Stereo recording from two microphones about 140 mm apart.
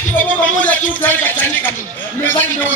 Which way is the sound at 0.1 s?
10° left (ahead or behind).